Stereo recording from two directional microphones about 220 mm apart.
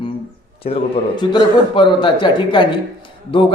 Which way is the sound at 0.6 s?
25° left (ahead or behind).